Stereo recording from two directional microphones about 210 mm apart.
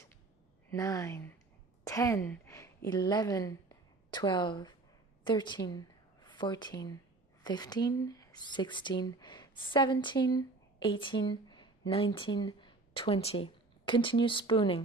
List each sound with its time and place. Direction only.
0.7 s a woman's voice: 15° left (ahead or behind)